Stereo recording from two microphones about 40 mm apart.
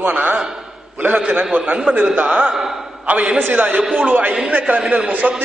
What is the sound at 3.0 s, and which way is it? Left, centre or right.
Speech, right.